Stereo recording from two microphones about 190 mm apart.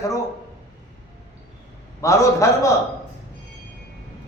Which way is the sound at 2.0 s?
15° left (ahead or behind).